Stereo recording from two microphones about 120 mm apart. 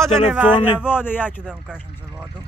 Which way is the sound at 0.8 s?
15° left (ahead or behind).